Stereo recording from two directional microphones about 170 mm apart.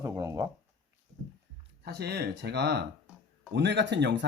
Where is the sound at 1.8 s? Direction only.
70° right (ahead or behind).